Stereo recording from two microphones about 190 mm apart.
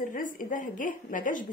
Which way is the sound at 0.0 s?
45° left (ahead or behind).